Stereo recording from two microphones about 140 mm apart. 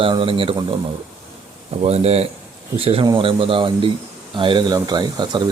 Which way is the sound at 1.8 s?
50° right (ahead or behind).